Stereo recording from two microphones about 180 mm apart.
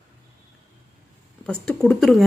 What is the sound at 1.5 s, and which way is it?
Speech, 5° left (ahead or behind).